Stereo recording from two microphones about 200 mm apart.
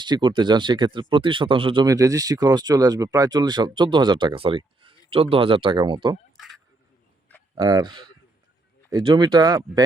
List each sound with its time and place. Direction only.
0.0 s speech: 20° right (ahead or behind)
6.3 s a sound: centre (ahead or behind)
7.5 s speech: 20° right (ahead or behind)